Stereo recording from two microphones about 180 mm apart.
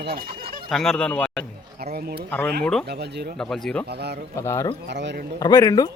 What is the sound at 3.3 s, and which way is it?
Speech, 5° left (ahead or behind).